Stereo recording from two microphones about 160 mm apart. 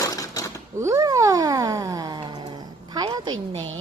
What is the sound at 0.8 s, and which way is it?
Cat, 20° right (ahead or behind).